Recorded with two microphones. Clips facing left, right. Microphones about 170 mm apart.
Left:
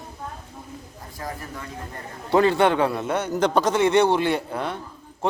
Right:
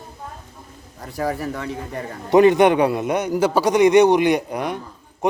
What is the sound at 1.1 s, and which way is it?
Speech, 75° right (ahead or behind).